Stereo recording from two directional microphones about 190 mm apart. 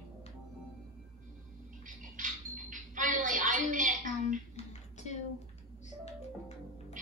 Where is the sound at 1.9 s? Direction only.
45° right (ahead or behind).